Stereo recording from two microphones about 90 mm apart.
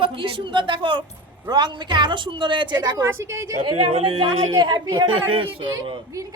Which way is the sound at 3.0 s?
30° right (ahead or behind).